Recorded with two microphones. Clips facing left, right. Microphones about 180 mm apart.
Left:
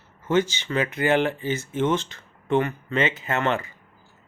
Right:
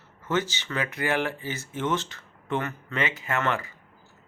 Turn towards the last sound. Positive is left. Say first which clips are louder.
# left 3 dB
turn(degrees=20)  # may be behind; listen again after turning